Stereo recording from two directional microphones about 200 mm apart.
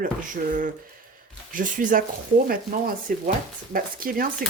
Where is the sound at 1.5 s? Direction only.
40° right (ahead or behind).